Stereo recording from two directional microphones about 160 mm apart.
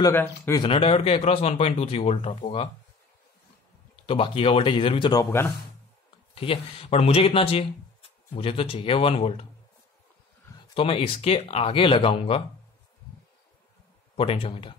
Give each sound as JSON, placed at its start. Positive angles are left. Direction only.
{"t": 0.0, "sound": "speech", "side_deg": 15}
{"t": 0.6, "sound": "speech", "side_deg": 35}
{"t": 4.0, "sound": "speech", "side_deg": 35}
{"t": 5.2, "sound": "speech", "side_deg": 15}
{"t": 6.3, "sound": "speech", "side_deg": 35}
{"t": 10.7, "sound": "speech", "side_deg": 35}
{"t": 14.1, "sound": "speech", "side_deg": 35}